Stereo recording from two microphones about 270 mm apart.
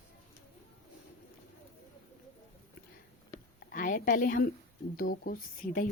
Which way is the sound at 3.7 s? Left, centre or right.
Left.